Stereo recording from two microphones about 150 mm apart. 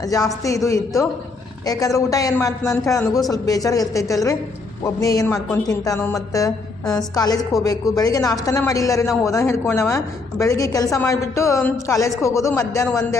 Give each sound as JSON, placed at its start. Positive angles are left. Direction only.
{"t": 0.0, "sound": "a woman's voice", "side_deg": 25}
{"t": 7.2, "sound": "a woman's voice", "side_deg": 25}